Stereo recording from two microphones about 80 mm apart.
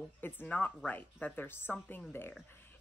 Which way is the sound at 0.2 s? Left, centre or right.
Left.